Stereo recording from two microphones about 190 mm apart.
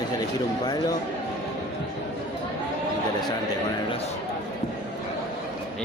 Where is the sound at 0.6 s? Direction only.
20° left (ahead or behind).